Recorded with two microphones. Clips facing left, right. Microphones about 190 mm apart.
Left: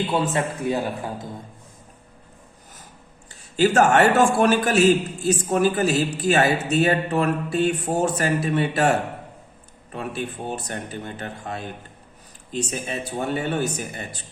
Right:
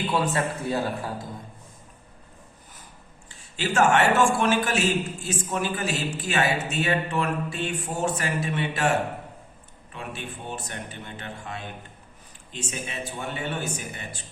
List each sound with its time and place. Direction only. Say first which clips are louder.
0.3 s speech: left 3 dB; 15° left (ahead or behind)
3.6 s speech: left 5 dB; 40° left (ahead or behind)
9.9 s speech: left 7 dB; 40° left (ahead or behind)